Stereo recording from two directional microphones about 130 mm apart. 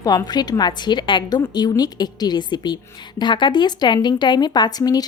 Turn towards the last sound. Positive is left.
turn(degrees=30)  # may be behind; listen again after turning